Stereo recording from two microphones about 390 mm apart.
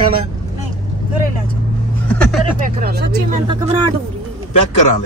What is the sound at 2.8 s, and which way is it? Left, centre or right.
Speech, right.